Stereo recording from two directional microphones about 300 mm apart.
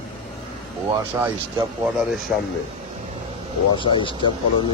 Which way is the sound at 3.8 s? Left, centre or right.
Centre.